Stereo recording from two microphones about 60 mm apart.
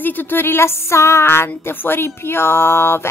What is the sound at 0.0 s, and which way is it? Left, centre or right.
Speech, left.